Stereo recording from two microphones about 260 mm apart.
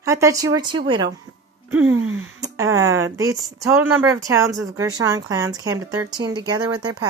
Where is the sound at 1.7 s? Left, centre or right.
Right.